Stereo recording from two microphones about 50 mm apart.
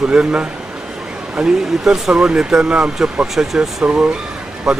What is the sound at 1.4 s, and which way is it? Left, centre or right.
A man's voice, centre.